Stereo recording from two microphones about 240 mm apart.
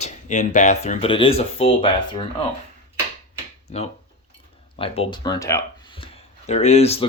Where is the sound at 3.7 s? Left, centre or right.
Left.